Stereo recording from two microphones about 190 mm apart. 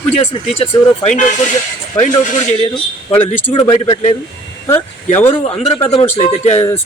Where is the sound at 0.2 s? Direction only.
30° left (ahead or behind).